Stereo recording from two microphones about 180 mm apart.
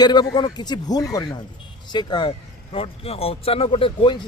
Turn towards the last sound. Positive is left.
turn(degrees=30)  # may be behind; listen again after turning